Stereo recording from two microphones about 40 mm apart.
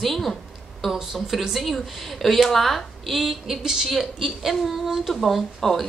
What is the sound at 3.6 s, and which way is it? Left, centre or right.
Speech, centre.